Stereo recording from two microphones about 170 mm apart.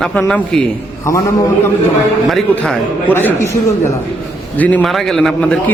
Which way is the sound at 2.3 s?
5° left (ahead or behind).